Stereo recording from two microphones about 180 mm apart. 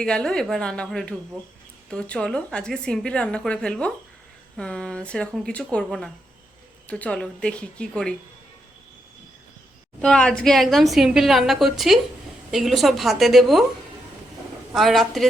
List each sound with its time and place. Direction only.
0.0 s speech: 5° left (ahead or behind)
10.0 s speech: 5° left (ahead or behind)
14.7 s speech: centre (ahead or behind)